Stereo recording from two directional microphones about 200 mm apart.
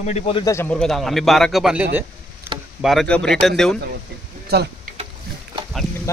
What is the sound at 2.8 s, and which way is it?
Speech, 5° left (ahead or behind).